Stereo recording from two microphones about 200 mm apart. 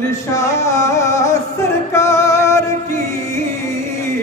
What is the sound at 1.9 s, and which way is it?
Music, 15° left (ahead or behind).